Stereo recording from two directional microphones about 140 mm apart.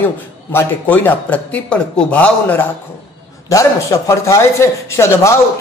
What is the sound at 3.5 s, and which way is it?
A man's voice, 25° left (ahead or behind).